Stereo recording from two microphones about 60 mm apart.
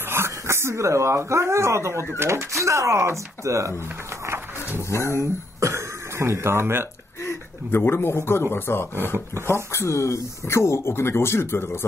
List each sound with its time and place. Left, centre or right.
0.1 s speech: right
4.8 s speech: left
5.1 s speech: right
7.2 s speech: left
9.0 s speech: right
9.5 s speech: left